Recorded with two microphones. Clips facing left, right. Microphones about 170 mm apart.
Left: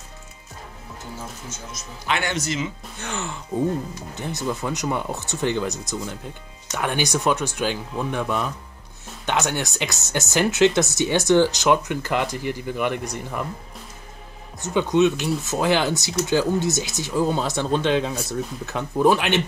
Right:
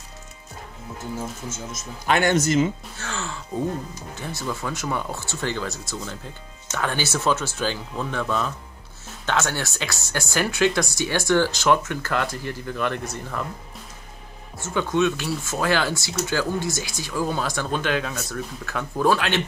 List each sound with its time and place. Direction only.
1.5 s speech: 50° right (ahead or behind)
3.0 s speech: 15° left (ahead or behind)
14.6 s speech: 20° left (ahead or behind)